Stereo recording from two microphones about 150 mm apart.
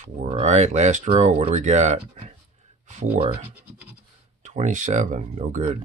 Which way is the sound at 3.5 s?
10° right (ahead or behind).